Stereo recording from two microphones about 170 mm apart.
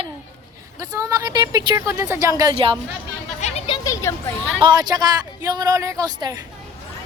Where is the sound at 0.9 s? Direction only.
20° right (ahead or behind).